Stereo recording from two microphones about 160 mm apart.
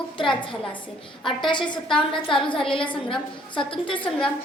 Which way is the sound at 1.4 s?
30° left (ahead or behind).